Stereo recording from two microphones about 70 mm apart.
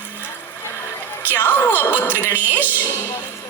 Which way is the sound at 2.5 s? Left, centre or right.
Left.